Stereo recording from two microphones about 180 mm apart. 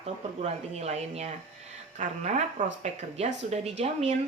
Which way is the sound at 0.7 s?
35° right (ahead or behind).